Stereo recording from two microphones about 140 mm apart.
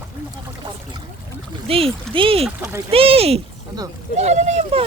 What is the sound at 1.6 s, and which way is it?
Speech, 45° right (ahead or behind).